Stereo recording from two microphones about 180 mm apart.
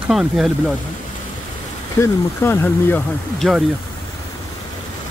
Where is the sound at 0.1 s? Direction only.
Centre (ahead or behind).